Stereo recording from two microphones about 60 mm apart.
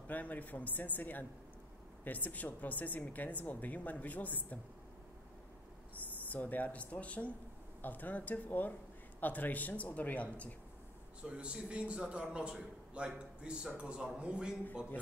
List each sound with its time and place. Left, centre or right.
0.1 s a woman's voice: left
6.3 s a woman's voice: left
11.2 s a man's voice: centre